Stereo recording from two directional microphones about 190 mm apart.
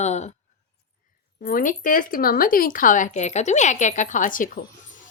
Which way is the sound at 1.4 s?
45° left (ahead or behind).